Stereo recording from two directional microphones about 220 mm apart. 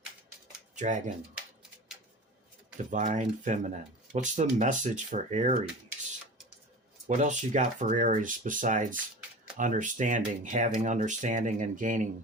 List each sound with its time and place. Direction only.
0.8 s speech: 35° right (ahead or behind)
2.9 s speech: 35° right (ahead or behind)
7.2 s speech: 35° right (ahead or behind)